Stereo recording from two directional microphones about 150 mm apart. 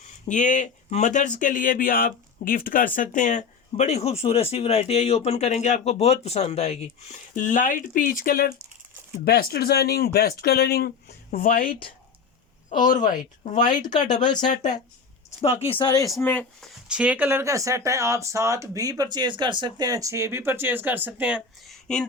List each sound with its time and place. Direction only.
0.1 s speech: 55° left (ahead or behind); by 8.5 s 80° left
9.2 s speech: 90° left
12.9 s speech: 60° left (ahead or behind)
13.7 s speech: 30° left (ahead or behind)
15.4 s speech: 40° left (ahead or behind)
15.8 s speech: 25° left (ahead or behind)
16.2 s speech: 10° left (ahead or behind)
16.9 s speech: 10° right (ahead or behind)